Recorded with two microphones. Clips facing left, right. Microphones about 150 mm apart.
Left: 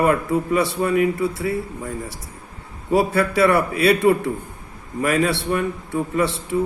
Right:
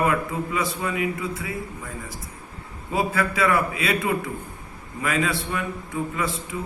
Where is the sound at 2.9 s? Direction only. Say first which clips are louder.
Left 6 dB; 40° left (ahead or behind).